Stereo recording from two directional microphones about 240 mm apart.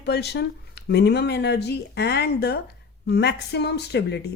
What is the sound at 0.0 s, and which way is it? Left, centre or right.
Speech, left.